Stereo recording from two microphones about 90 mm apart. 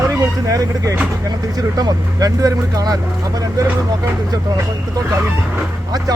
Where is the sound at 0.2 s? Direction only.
40° right (ahead or behind).